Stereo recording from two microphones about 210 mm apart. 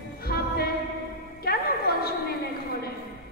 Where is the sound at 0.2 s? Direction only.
45° left (ahead or behind).